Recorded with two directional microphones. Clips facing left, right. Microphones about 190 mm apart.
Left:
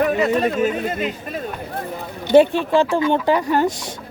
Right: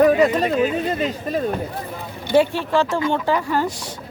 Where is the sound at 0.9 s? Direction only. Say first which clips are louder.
Right 2 dB; 35° right (ahead or behind).